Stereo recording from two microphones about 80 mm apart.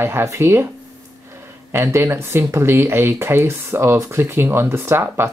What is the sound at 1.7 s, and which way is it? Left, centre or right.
Speech, right.